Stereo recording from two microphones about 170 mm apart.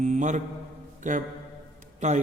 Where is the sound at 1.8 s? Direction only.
45° right (ahead or behind).